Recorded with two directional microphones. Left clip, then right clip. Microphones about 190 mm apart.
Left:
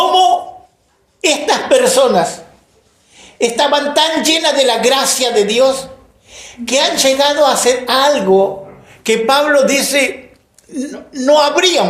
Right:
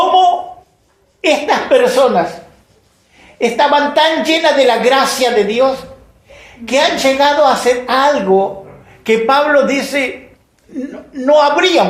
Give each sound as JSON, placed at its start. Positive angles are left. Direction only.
{"t": 1.2, "sound": "a woman's voice", "side_deg": 35}
{"t": 3.3, "sound": "a woman's voice", "side_deg": 35}
{"t": 6.7, "sound": "a woman's voice", "side_deg": 35}